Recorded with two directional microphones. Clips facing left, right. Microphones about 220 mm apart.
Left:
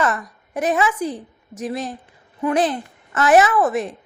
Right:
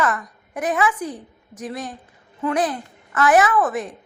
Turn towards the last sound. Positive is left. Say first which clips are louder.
# left 2 dB
turn(degrees=25)  # may be behind; listen again after turning